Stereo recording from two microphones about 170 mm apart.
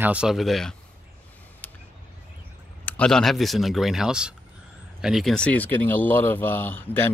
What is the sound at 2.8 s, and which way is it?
Speech, 5° left (ahead or behind).